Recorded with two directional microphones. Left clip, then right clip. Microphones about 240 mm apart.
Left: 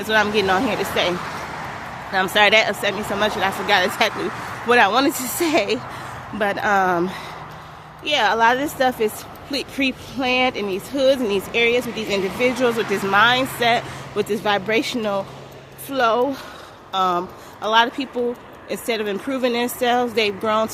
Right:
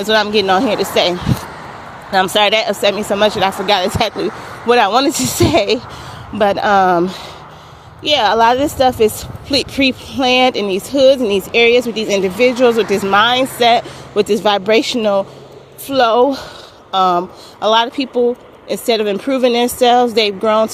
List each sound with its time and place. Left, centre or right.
0.0 s speech: right
2.1 s speech: right
8.0 s speech: right